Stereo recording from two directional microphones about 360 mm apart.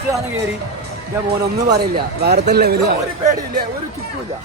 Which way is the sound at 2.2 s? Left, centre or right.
Right.